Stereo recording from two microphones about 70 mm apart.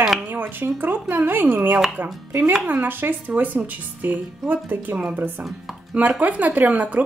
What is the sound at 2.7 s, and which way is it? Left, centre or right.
Speech, right.